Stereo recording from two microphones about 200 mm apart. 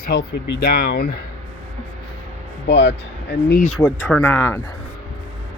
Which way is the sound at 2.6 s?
60° left (ahead or behind).